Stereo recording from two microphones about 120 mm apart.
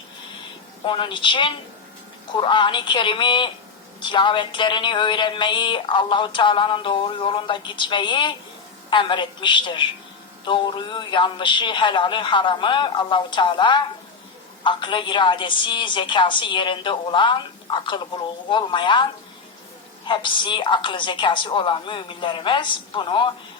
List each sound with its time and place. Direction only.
0.9 s a woman's voice: 45° left (ahead or behind)
20.1 s a woman's voice: 40° left (ahead or behind)